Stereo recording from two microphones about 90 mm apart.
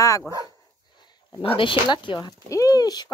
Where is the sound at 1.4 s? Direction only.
80° left; by 2.3 s 55° left (ahead or behind).